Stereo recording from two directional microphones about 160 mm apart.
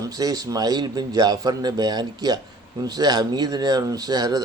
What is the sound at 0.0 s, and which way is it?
Speech, 25° right (ahead or behind).